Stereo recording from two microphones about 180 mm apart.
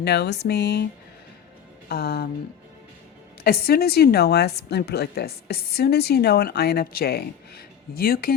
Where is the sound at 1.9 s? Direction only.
60° left (ahead or behind).